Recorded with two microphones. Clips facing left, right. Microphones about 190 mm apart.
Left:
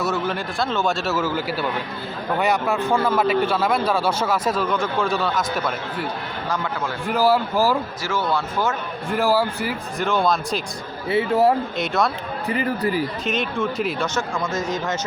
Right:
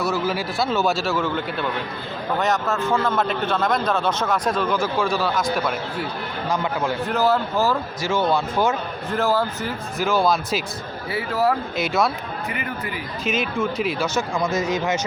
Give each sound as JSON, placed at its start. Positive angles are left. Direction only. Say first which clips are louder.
{"t": 0.0, "sound": "a man's voice", "louder": "right 1 dB", "side_deg": 0}
{"t": 8.0, "sound": "speech", "louder": "right 5 dB", "side_deg": -20}
{"t": 9.0, "sound": "a man's voice", "louder": "left 2 dB", "side_deg": 10}
{"t": 10.0, "sound": "speech", "louder": "right 1 dB", "side_deg": -5}
{"t": 11.1, "sound": "speech", "louder": "left 4 dB", "side_deg": 25}
{"t": 11.8, "sound": "speech", "louder": "even", "side_deg": 0}
{"t": 12.5, "sound": "speech", "louder": "left 10 dB", "side_deg": 35}
{"t": 13.2, "sound": "speech", "louder": "even", "side_deg": 0}
{"t": 14.2, "sound": "speech", "louder": "right 2 dB", "side_deg": -10}